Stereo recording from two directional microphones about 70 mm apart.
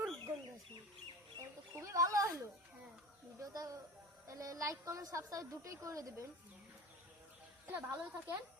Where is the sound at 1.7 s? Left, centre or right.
Right.